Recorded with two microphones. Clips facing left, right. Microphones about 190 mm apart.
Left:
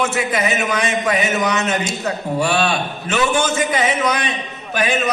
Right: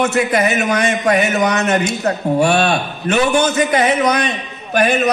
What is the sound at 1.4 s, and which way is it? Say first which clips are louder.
Speech: right 4 dB; 65° right (ahead or behind).